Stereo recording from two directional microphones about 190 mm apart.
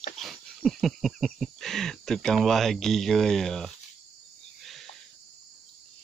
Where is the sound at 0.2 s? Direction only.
Centre (ahead or behind).